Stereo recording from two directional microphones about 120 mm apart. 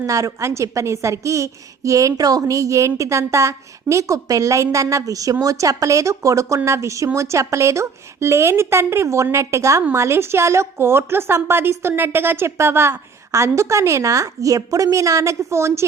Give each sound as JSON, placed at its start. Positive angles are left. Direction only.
{"t": 0.0, "sound": "a woman's voice", "side_deg": -30}